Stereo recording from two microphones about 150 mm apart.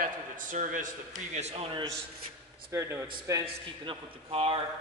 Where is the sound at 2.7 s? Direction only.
15° right (ahead or behind).